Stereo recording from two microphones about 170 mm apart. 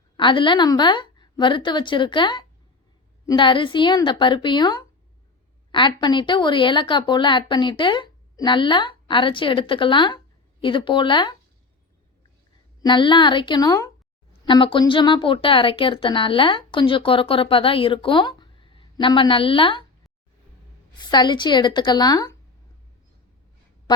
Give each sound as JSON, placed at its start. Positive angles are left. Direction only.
{"t": 0.2, "sound": "speech", "side_deg": 30}
{"t": 12.8, "sound": "speech", "side_deg": 30}
{"t": 21.0, "sound": "speech", "side_deg": 25}